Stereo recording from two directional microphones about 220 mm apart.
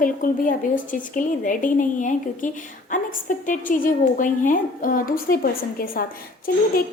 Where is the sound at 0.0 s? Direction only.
40° left (ahead or behind).